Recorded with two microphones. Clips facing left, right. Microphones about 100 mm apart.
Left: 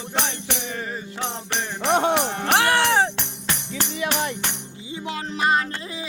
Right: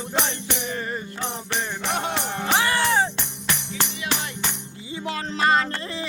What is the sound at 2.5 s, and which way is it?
Jingle bell, 75° left (ahead or behind).